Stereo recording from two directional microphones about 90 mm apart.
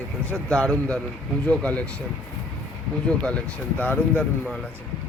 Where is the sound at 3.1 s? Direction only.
10° left (ahead or behind).